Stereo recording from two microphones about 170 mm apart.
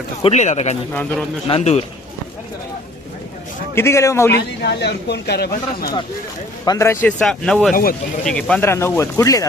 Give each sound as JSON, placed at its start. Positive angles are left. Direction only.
{"t": 0.2, "sound": "speech", "side_deg": 40}
{"t": 3.8, "sound": "speech", "side_deg": 15}
{"t": 4.4, "sound": "speech", "side_deg": 80}
{"t": 6.7, "sound": "speech", "side_deg": 15}
{"t": 7.7, "sound": "speech", "side_deg": 60}
{"t": 8.2, "sound": "speech", "side_deg": 5}